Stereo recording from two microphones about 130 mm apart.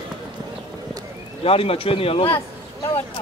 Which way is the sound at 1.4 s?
45° left (ahead or behind).